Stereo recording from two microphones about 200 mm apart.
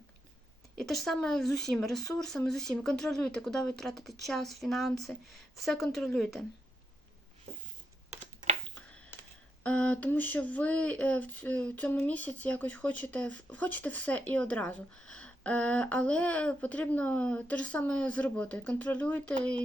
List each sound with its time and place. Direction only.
0.9 s speech: centre (ahead or behind)
8.2 s a sound: 35° right (ahead or behind)
9.6 s speech: 5° left (ahead or behind)